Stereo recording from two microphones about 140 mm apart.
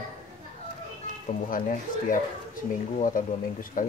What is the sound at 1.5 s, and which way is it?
Speech, 75° left (ahead or behind).